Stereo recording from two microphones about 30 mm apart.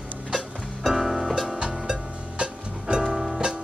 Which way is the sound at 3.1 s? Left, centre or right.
Centre.